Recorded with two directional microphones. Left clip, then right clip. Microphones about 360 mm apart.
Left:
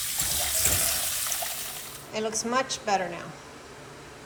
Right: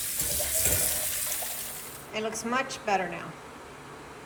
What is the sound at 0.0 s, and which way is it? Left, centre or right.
Water, centre.